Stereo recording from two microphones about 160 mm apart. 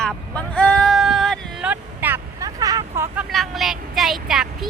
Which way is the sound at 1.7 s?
10° right (ahead or behind).